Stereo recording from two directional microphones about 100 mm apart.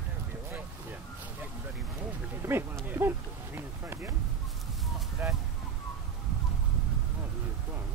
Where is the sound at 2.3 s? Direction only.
25° right (ahead or behind).